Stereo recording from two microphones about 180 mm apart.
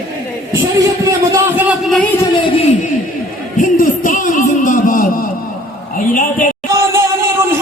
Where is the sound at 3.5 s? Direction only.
45° left (ahead or behind).